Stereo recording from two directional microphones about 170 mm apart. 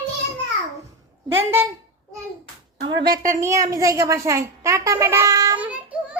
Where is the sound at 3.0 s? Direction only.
55° right (ahead or behind).